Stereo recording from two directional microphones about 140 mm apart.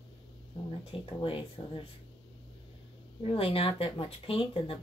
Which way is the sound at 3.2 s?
40° left (ahead or behind).